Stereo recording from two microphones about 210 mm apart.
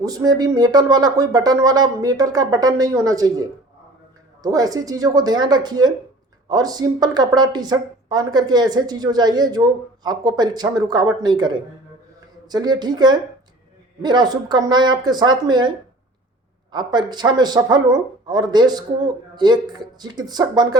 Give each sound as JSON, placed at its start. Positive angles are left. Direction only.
{"t": 0.0, "sound": "a woman's voice", "side_deg": -15}
{"t": 16.7, "sound": "a woman's voice", "side_deg": -20}